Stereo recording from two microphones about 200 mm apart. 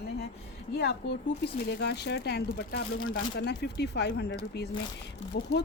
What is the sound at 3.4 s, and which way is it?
Speech, 60° left (ahead or behind).